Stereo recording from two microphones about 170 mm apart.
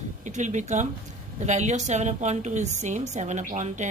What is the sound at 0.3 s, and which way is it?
A woman's voice, 45° right (ahead or behind).